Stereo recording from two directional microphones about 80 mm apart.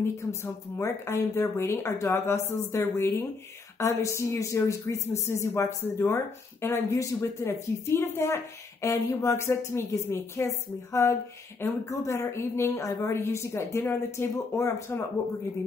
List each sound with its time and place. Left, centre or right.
0.0 s speech: left